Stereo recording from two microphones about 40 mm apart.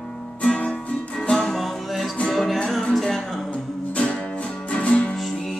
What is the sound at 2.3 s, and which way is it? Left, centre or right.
Music, centre.